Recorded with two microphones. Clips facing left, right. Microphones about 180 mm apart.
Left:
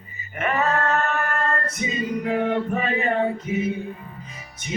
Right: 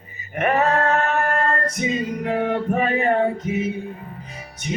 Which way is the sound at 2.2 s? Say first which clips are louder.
Right 1 dB; 45° right (ahead or behind).